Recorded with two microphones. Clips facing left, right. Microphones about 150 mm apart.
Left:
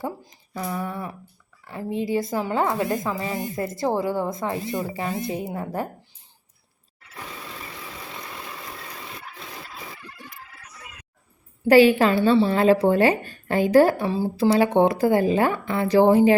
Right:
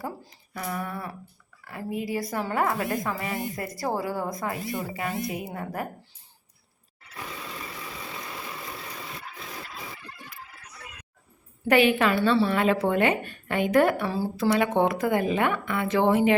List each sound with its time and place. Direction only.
0.0 s a woman's voice: 20° left (ahead or behind)
11.7 s a woman's voice: 35° left (ahead or behind)
14.0 s a woman's voice: 20° left (ahead or behind)
14.5 s a woman's voice: 30° left (ahead or behind)